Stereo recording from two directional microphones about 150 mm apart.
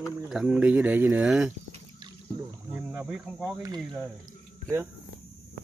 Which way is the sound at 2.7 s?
5° right (ahead or behind).